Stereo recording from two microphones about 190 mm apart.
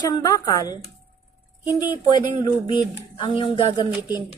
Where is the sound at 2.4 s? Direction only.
25° left (ahead or behind).